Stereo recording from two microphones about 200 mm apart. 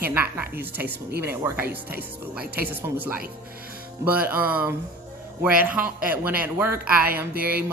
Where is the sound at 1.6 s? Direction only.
50° right (ahead or behind).